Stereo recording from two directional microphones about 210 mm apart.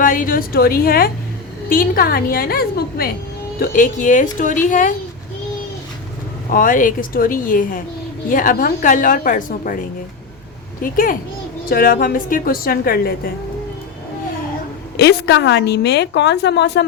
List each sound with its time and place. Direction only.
0.0 s a woman's voice: 40° left (ahead or behind)
6.5 s a woman's voice: 40° left (ahead or behind)
14.9 s a woman's voice: 55° left (ahead or behind)